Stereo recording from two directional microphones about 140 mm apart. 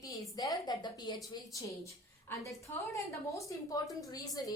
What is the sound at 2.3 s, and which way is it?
A woman's voice, 15° left (ahead or behind).